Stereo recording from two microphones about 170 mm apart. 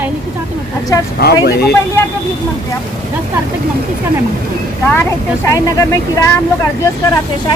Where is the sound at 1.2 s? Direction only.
70° left (ahead or behind).